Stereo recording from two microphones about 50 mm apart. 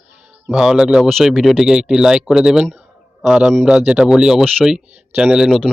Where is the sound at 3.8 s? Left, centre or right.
Right.